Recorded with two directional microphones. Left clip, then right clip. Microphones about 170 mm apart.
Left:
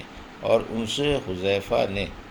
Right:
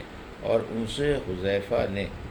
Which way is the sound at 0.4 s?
35° left (ahead or behind).